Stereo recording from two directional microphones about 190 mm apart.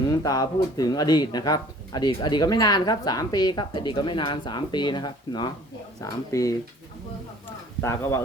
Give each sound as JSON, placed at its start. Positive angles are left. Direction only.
{"t": 0.1, "sound": "speech", "side_deg": 20}
{"t": 7.8, "sound": "speech", "side_deg": 15}